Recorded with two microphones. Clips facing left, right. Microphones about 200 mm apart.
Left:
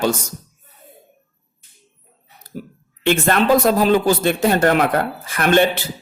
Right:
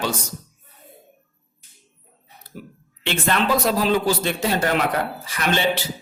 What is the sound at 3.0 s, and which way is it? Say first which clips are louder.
A man's voice: left 6 dB; 45° left (ahead or behind).